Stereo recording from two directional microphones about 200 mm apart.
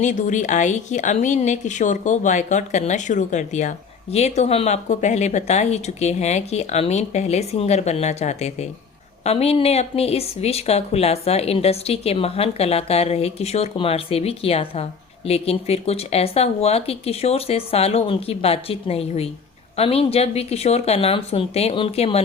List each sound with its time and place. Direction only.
0.0 s speech: 40° left (ahead or behind)